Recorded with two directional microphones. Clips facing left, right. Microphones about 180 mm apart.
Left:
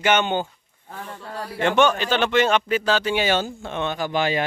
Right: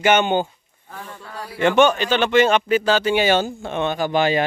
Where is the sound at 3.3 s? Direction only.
55° right (ahead or behind).